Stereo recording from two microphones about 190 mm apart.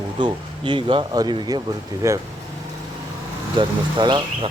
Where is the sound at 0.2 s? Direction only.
25° right (ahead or behind).